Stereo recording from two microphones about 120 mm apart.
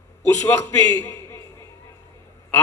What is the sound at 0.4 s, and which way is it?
A man's voice, 25° left (ahead or behind).